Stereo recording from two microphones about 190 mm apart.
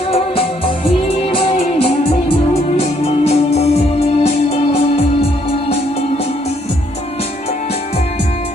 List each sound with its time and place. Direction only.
0.1 s music: 30° left (ahead or behind)